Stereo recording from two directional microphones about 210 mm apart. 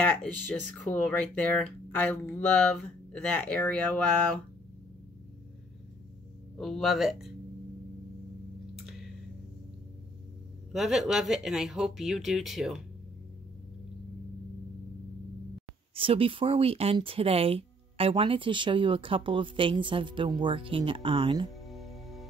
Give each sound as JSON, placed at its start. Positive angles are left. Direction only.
{"t": 0.0, "sound": "speech", "side_deg": 5}
{"t": 6.6, "sound": "speech", "side_deg": 0}
{"t": 10.7, "sound": "speech", "side_deg": 0}
{"t": 15.9, "sound": "speech", "side_deg": -25}
{"t": 21.6, "sound": "music", "side_deg": 0}